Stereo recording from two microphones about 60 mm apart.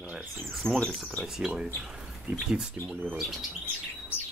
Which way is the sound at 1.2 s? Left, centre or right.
Centre.